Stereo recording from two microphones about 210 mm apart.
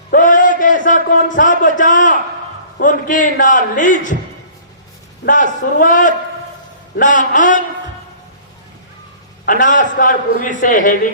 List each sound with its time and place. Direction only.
0.1 s a sound: 40° left (ahead or behind)
2.8 s a man's voice: 40° left (ahead or behind)
5.2 s a man's voice: 40° left (ahead or behind)
9.5 s a man's voice: 40° left (ahead or behind)